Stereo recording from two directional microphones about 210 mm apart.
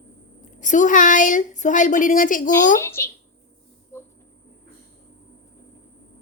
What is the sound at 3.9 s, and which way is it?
Cricket, 10° left (ahead or behind).